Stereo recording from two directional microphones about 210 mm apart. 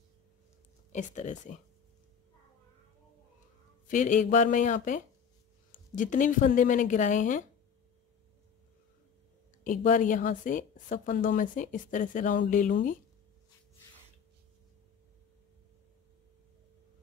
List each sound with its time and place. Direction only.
0.9 s a woman's voice: 35° left (ahead or behind)
3.8 s a woman's voice: 35° left (ahead or behind)
9.7 s a woman's voice: 40° left (ahead or behind)